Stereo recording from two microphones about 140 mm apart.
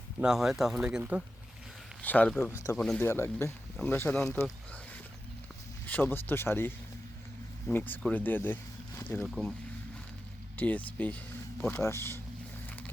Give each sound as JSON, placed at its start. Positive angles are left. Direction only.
{"t": 0.2, "sound": "speech", "side_deg": -5}
{"t": 2.0, "sound": "speech", "side_deg": 10}
{"t": 3.0, "sound": "speech", "side_deg": 15}
{"t": 5.9, "sound": "speech", "side_deg": 15}
{"t": 10.6, "sound": "speech", "side_deg": 10}